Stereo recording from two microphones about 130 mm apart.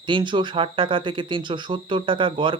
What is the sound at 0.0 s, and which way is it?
Speech, 40° right (ahead or behind).